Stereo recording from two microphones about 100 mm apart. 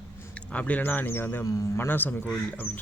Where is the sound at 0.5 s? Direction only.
15° left (ahead or behind).